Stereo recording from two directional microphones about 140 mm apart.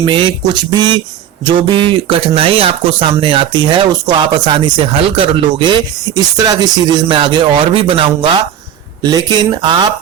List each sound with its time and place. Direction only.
0.0 s speech: 35° right (ahead or behind)